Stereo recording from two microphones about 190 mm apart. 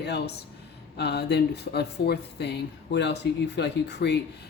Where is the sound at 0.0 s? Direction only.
60° left (ahead or behind).